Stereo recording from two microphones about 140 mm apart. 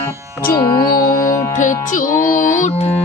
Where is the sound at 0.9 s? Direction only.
90° left.